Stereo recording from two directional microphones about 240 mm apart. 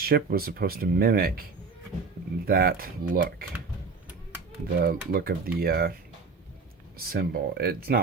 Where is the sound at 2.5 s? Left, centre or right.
Right.